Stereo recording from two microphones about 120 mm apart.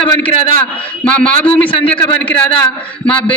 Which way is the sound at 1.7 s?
50° left (ahead or behind).